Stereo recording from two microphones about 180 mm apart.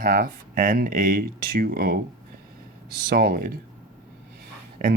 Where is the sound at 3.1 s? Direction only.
55° right (ahead or behind).